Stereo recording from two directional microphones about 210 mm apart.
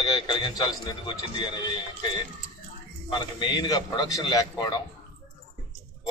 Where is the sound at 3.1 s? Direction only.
20° left (ahead or behind).